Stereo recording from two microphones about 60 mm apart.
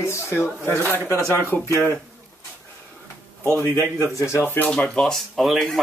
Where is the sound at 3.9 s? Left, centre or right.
Left.